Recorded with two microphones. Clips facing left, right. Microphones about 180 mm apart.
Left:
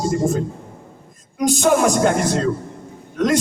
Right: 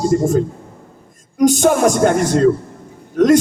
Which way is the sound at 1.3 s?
45° right (ahead or behind).